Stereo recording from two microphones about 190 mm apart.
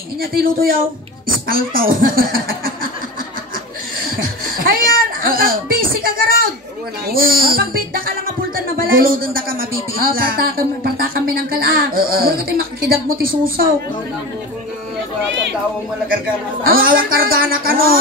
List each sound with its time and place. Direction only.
0.2 s speech: 50° right (ahead or behind)
4.0 s a sound: 50° right (ahead or behind)
7.1 s speech: 50° right (ahead or behind)
16.6 s speech: 50° right (ahead or behind)